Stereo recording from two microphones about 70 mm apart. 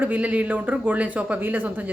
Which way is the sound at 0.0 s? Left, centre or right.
Right.